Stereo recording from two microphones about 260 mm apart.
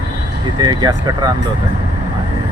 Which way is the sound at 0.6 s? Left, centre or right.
Centre.